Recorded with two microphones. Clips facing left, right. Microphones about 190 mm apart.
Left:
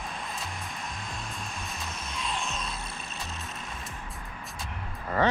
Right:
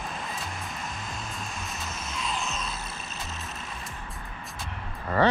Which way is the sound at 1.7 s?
Centre (ahead or behind).